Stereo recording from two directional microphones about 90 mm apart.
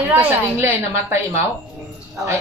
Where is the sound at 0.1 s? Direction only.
25° right (ahead or behind).